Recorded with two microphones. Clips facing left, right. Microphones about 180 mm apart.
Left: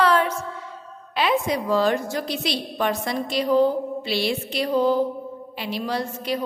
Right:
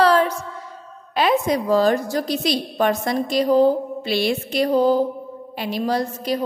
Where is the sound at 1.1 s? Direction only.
45° right (ahead or behind).